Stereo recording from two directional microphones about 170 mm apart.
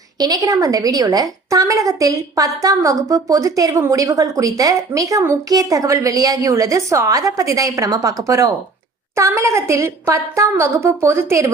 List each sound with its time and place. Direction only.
0.2 s a woman's voice: 20° right (ahead or behind)